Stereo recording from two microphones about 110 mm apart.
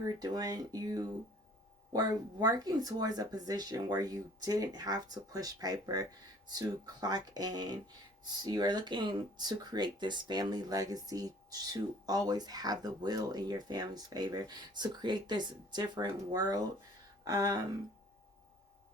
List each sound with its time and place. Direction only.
0.0 s speech: 35° right (ahead or behind)